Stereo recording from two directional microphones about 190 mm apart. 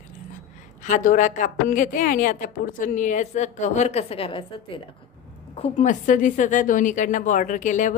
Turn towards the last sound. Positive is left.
turn(degrees=40)  # may be behind; listen again after turning